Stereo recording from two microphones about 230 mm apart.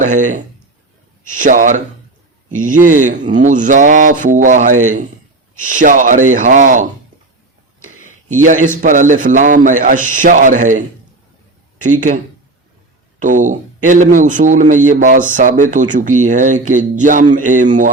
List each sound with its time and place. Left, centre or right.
0.0 s a man's voice: right
8.4 s a man's voice: right